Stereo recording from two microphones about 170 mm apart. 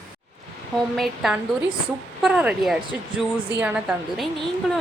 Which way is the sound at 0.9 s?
Centre (ahead or behind).